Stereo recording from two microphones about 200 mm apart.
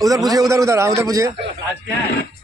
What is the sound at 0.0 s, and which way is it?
A man's voice, 15° right (ahead or behind).